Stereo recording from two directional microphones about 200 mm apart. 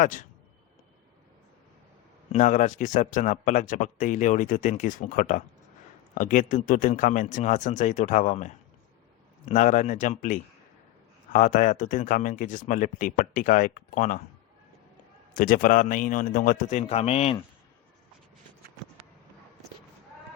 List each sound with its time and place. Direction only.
0.0 s speech: 40° left (ahead or behind)
2.3 s speech: 40° left (ahead or behind)
15.4 s speech: 45° left (ahead or behind)